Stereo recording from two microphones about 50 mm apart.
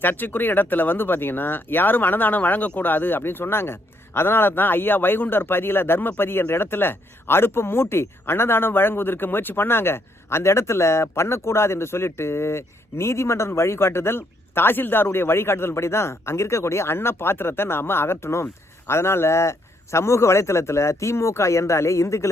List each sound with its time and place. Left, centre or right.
0.0 s speech: left